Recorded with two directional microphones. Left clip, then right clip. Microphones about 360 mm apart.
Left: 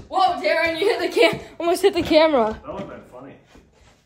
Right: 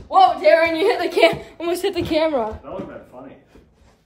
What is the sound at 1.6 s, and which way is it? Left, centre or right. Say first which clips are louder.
Speech: left 5 dB; centre.